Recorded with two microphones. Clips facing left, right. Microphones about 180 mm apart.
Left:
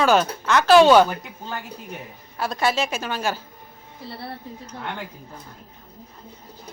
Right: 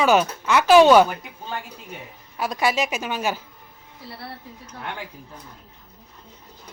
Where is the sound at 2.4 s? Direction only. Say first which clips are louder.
Even; 15° right (ahead or behind).